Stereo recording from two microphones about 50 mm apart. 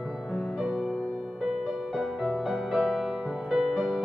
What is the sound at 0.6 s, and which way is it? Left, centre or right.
Music, centre.